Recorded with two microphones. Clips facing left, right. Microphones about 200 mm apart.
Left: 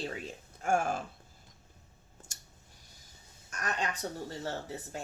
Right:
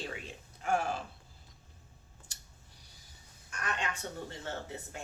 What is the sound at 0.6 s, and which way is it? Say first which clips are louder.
Speech: left 2 dB; 45° left (ahead or behind).